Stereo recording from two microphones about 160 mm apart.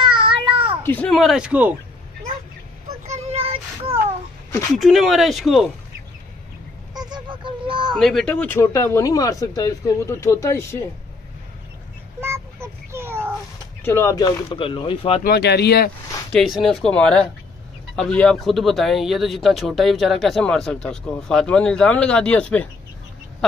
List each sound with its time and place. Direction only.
0.0 s child singing: 30° right (ahead or behind)
0.8 s speech: 10° left (ahead or behind); by 1.8 s 10° right (ahead or behind)
3.1 s child singing: 40° right (ahead or behind)
4.7 s speech: centre (ahead or behind)
6.9 s a sound: 25° right (ahead or behind)
7.9 s speech: centre (ahead or behind); by 10.8 s 15° left (ahead or behind)
12.2 s a sound: 15° right (ahead or behind)
13.8 s speech: 15° left (ahead or behind); by 15.2 s 35° left (ahead or behind)
15.2 s speech: 90° left
16.3 s speech: centre (ahead or behind)